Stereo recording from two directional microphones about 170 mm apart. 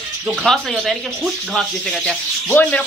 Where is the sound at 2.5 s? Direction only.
10° left (ahead or behind).